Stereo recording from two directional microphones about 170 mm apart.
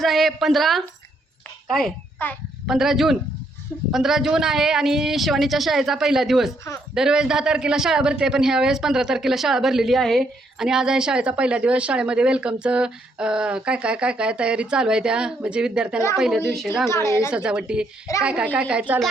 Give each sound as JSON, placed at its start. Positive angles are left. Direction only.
{"t": 0.0, "sound": "a man's voice", "side_deg": 0}
{"t": 2.2, "sound": "a woman's voice", "side_deg": 10}
{"t": 2.6, "sound": "a man's voice", "side_deg": 0}
{"t": 16.9, "sound": "a woman's voice", "side_deg": 15}
{"t": 17.3, "sound": "a man's voice", "side_deg": -5}